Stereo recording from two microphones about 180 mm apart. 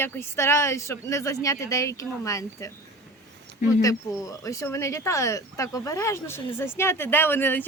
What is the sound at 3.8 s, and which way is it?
Speech, 20° left (ahead or behind).